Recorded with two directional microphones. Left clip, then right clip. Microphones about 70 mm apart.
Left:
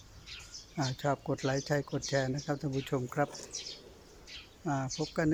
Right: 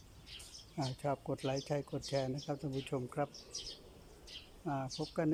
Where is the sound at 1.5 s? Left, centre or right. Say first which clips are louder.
Left 5 dB; centre.